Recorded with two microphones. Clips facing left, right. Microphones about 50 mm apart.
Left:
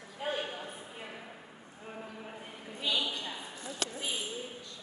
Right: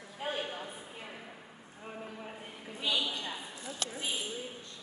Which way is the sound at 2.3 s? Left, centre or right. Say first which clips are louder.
Even; centre.